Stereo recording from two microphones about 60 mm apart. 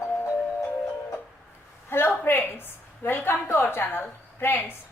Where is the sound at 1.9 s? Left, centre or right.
Left.